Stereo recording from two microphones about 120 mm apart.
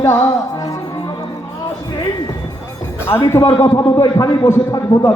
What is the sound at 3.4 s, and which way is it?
A man's voice, 35° left (ahead or behind).